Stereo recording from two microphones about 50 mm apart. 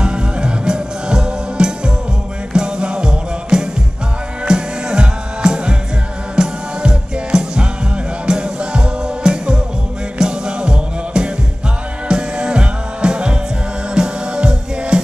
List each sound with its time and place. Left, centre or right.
0.0 s music: centre